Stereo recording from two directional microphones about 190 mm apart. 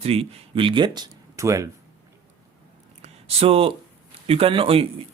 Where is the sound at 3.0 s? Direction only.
30° right (ahead or behind).